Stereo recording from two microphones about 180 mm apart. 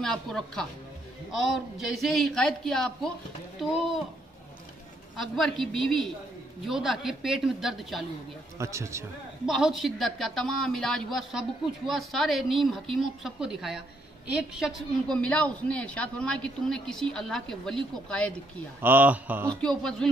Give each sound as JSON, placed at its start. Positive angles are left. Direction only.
{"t": 0.0, "sound": "a man's voice", "side_deg": 5}
{"t": 5.2, "sound": "a man's voice", "side_deg": 0}
{"t": 8.5, "sound": "a man's voice", "side_deg": -15}
{"t": 9.5, "sound": "a man's voice", "side_deg": 0}
{"t": 18.8, "sound": "a man's voice", "side_deg": -10}
{"t": 19.6, "sound": "a man's voice", "side_deg": 5}